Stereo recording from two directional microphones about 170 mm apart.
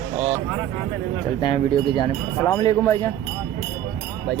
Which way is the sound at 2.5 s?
20° left (ahead or behind).